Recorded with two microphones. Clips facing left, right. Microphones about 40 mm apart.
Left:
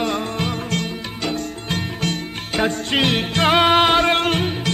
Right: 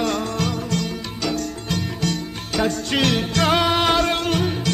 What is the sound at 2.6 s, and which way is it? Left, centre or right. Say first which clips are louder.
Music: left 1 dB; left.